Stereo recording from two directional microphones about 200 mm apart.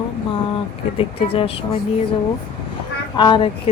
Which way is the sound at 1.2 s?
30° left (ahead or behind).